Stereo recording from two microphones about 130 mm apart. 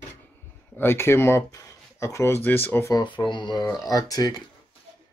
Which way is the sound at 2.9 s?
35° left (ahead or behind).